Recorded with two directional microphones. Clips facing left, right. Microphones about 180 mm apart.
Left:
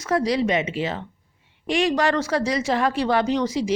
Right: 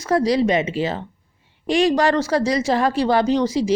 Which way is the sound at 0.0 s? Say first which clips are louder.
Right 4 dB; 35° right (ahead or behind).